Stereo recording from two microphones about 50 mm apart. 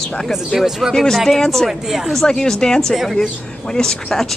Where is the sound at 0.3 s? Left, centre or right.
Centre.